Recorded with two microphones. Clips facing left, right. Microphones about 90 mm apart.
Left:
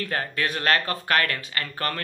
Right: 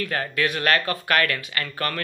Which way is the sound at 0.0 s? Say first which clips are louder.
Right 2 dB; 30° left (ahead or behind).